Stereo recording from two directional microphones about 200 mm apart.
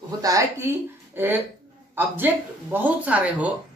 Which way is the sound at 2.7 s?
10° right (ahead or behind).